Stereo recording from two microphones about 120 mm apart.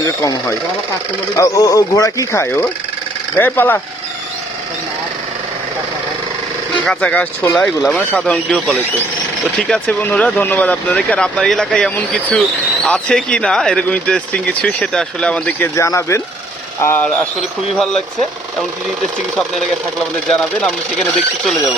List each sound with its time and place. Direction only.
0.0 s speech: 25° left (ahead or behind)
6.8 s speech: 10° left (ahead or behind)
15.7 s speech: 25° left (ahead or behind)
17.2 s speech: 5° left (ahead or behind)
20.2 s speech: 10° left (ahead or behind)